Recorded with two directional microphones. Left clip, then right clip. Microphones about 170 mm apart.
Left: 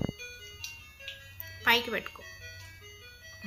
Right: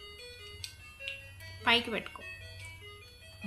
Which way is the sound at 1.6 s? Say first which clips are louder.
Left 2 dB; 15° right (ahead or behind).